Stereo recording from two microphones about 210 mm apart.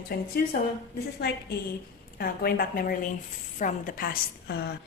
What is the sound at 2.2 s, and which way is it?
A woman's voice, 45° left (ahead or behind).